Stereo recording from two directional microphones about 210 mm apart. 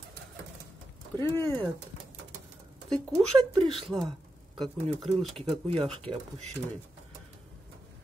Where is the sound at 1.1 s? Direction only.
10° left (ahead or behind).